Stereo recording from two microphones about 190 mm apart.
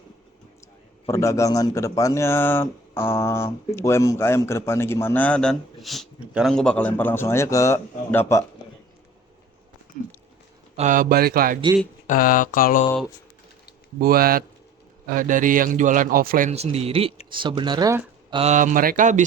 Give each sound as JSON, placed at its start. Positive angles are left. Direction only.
{"t": 1.0, "sound": "speech", "side_deg": 15}
{"t": 10.0, "sound": "a sound", "side_deg": 45}
{"t": 10.8, "sound": "a man's voice", "side_deg": -45}
{"t": 12.0, "sound": "a sound", "side_deg": 45}
{"t": 14.0, "sound": "a man's voice", "side_deg": -50}
{"t": 16.5, "sound": "speech", "side_deg": -35}
{"t": 18.3, "sound": "a man's voice", "side_deg": -40}